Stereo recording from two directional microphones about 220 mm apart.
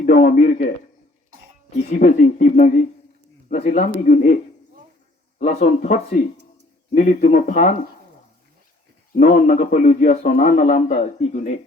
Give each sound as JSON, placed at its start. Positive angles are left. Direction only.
{"t": 0.0, "sound": "a man's voice", "side_deg": 40}
{"t": 1.7, "sound": "a man's voice", "side_deg": 40}
{"t": 5.4, "sound": "a man's voice", "side_deg": 30}
{"t": 9.1, "sound": "a man's voice", "side_deg": 40}